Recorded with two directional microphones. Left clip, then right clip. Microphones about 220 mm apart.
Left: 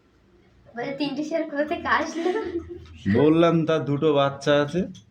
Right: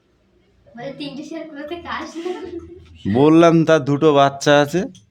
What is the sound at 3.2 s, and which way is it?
Speech, 40° right (ahead or behind).